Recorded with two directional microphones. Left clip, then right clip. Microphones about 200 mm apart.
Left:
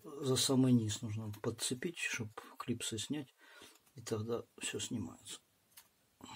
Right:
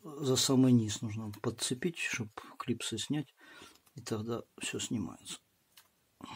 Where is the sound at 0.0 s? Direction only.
30° right (ahead or behind).